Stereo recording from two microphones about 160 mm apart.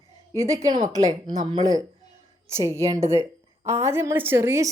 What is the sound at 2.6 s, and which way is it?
A woman's voice, 20° right (ahead or behind).